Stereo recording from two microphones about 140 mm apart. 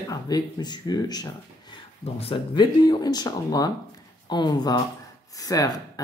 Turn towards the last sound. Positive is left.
turn(degrees=25)  # may be behind; listen again after turning